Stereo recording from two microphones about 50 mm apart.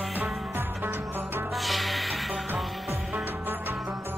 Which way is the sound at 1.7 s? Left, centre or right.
Centre.